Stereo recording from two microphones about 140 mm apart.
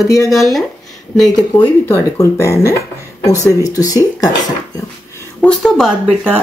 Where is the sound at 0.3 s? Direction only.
Centre (ahead or behind).